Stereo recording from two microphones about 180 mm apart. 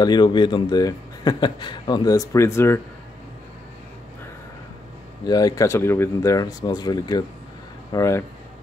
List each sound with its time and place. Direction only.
0.0 s a man's voice: 25° left (ahead or behind)
5.2 s a man's voice: 20° left (ahead or behind)